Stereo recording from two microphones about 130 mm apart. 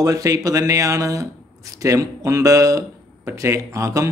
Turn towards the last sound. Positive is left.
turn(degrees=-25)  # may be behind; listen again after turning